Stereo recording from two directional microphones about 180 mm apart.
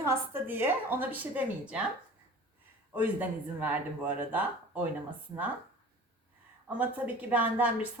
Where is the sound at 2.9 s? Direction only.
10° right (ahead or behind).